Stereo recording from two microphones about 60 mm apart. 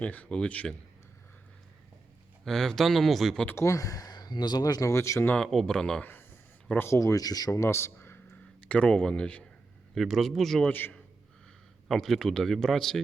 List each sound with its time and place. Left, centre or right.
0.0 s speech: left
2.4 s speech: centre
3.5 s speech: left
4.9 s speech: left
5.4 s speech: centre
6.0 s speech: left
6.7 s speech: left
7.7 s a sound: left
8.6 s speech: centre
9.9 s speech: centre
10.7 s a man's voice: left
11.9 s speech: centre